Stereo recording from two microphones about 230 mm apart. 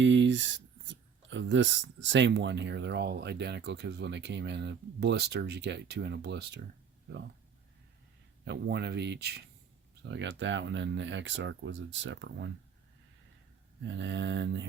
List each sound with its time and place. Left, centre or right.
0.0 s speech: right
8.4 s speech: right
13.8 s speech: right